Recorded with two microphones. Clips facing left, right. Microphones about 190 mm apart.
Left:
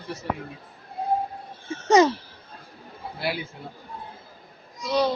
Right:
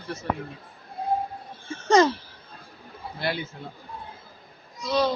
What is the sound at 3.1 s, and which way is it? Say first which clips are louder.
Speech: even; 5° left (ahead or behind).